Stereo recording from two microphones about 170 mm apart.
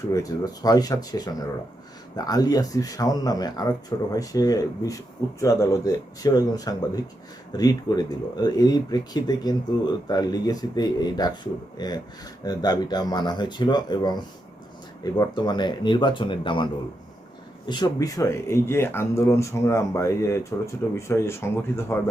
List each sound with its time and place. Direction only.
0.1 s speech: 20° left (ahead or behind)
17.7 s speech: 25° left (ahead or behind)